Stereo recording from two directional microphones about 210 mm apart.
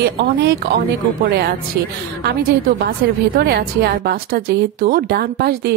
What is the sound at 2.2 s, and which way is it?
A woman's voice, 50° right (ahead or behind).